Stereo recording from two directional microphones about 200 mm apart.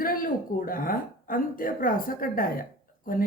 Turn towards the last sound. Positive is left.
turn(degrees=45)  # may be behind; listen again after turning